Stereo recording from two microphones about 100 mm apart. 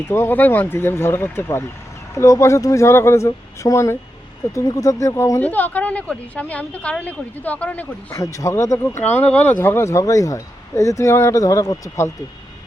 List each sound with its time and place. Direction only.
0.1 s speech: 20° left (ahead or behind)
5.5 s speech: 15° left (ahead or behind)
8.1 s speech: 35° left (ahead or behind)
9.2 s speech: 15° left (ahead or behind); by 12.1 s 35° left (ahead or behind)